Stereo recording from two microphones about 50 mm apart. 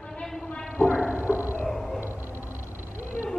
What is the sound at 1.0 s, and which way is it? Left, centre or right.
Music, right.